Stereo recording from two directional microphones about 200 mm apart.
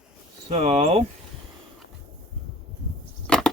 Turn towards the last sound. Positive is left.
turn(degrees=5)  # may be behind; listen again after turning